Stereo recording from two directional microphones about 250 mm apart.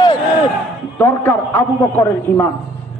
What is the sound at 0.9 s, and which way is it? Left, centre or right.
A man's voice, centre.